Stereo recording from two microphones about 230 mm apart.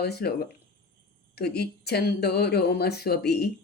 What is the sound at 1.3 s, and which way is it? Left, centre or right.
Speech, left.